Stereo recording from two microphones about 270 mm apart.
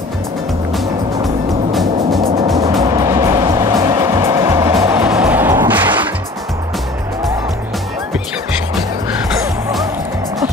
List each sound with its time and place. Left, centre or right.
2.4 s music: centre